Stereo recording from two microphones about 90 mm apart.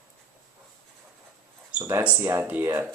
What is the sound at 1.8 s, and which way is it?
Speech, 25° right (ahead or behind).